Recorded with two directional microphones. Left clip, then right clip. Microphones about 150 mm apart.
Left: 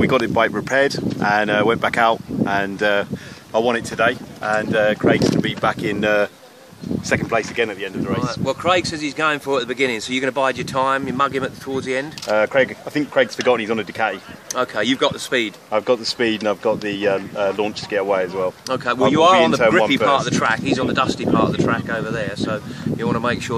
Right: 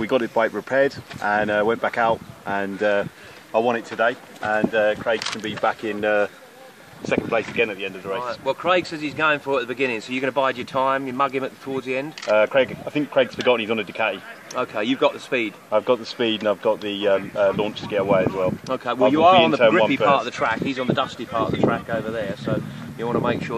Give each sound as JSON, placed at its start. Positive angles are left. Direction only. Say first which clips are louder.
{"t": 0.0, "sound": "speech", "louder": "left 4 dB", "side_deg": 30}
{"t": 7.2, "sound": "speech", "louder": "left 2 dB", "side_deg": 10}
{"t": 8.2, "sound": "speech", "louder": "left 1 dB", "side_deg": 30}
{"t": 18.7, "sound": "speech", "louder": "left 2 dB", "side_deg": 30}